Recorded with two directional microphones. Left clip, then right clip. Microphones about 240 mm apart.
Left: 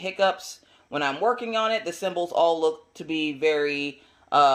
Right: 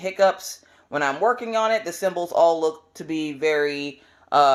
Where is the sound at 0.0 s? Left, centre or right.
Centre.